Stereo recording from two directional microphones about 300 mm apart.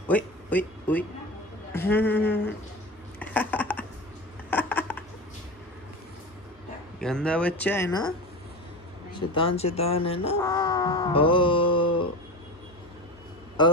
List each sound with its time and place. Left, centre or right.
0.1 s a woman's voice: centre
3.2 s a sound: centre
7.0 s speech: centre
9.1 s speech: centre
9.6 s a sound: centre
13.6 s a man's voice: centre